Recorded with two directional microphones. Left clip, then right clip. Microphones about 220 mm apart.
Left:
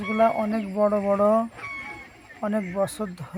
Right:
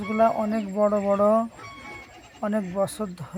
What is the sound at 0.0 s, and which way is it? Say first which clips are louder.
Speech: even; centre (ahead or behind).